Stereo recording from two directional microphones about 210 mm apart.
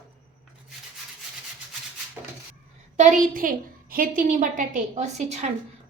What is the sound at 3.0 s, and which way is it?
A woman's voice, 40° right (ahead or behind).